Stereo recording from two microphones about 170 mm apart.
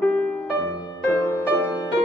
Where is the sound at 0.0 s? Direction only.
10° left (ahead or behind).